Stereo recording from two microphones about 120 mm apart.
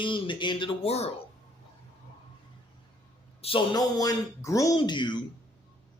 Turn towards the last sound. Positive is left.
turn(degrees=40)  # may be behind; listen again after turning